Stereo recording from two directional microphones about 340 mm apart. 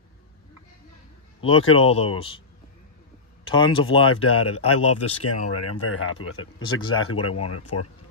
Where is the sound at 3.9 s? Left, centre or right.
Left.